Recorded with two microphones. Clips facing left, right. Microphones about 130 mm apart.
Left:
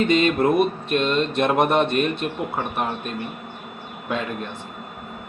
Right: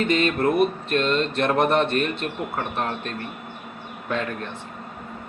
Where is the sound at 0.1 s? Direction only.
20° left (ahead or behind).